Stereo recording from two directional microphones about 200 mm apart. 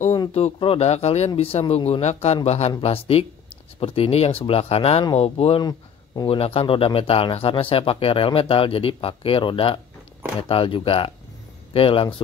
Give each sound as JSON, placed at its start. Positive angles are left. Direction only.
{"t": 0.3, "sound": "speech", "side_deg": 30}